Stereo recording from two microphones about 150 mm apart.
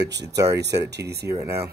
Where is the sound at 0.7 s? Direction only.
90° right.